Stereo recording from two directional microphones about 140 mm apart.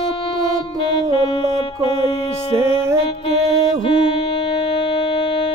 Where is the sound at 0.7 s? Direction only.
40° left (ahead or behind).